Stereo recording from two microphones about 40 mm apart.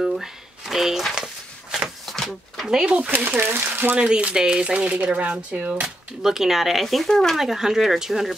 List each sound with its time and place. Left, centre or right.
0.0 s shuffling cards: centre
1.1 s a sound: centre
2.2 s a sound: centre
2.6 s speech: centre
3.1 s speech: right
3.9 s speech: right
6.2 s speech: centre
7.3 s speech: centre